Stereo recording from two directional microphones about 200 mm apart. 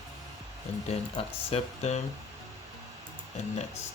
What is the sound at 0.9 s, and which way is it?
Speech, 30° left (ahead or behind).